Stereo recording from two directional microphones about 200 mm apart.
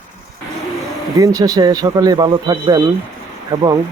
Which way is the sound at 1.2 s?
15° right (ahead or behind).